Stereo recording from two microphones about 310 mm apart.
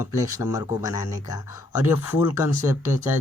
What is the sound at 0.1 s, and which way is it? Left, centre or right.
Speech, centre.